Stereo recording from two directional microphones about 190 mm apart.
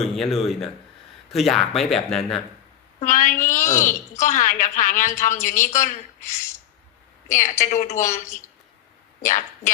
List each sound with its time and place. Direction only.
0.0 s speech: centre (ahead or behind)
3.0 s a woman's voice: 40° left (ahead or behind)
3.6 s speech: 15° left (ahead or behind)
3.8 s a woman's voice: 40° left (ahead or behind)
9.2 s a woman's voice: 40° left (ahead or behind)